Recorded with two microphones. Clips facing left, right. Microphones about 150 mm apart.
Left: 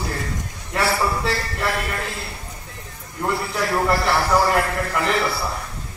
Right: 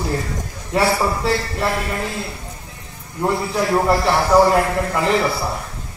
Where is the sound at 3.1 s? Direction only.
25° right (ahead or behind).